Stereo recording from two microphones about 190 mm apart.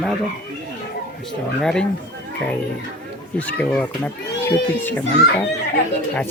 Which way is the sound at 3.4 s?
5° left (ahead or behind).